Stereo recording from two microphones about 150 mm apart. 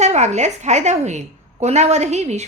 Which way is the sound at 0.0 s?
50° right (ahead or behind).